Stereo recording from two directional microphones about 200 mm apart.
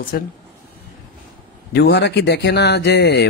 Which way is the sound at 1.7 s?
55° left (ahead or behind).